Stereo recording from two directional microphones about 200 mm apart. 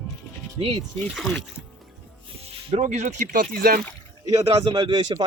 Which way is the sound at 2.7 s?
35° right (ahead or behind).